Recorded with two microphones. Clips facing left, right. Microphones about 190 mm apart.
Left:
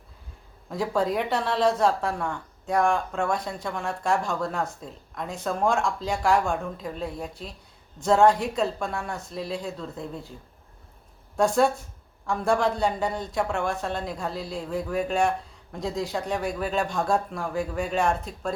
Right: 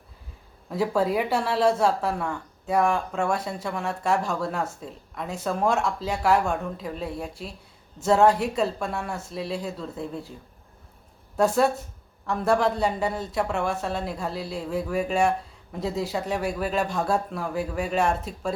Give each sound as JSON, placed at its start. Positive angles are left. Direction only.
{"t": 0.7, "sound": "a woman's voice", "side_deg": -5}
{"t": 11.3, "sound": "a woman's voice", "side_deg": -5}